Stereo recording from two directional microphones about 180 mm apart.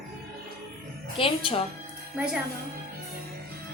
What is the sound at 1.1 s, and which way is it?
Speech, 30° left (ahead or behind).